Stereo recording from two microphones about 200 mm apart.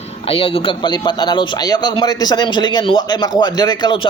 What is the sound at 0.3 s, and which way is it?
A man's voice, 25° left (ahead or behind).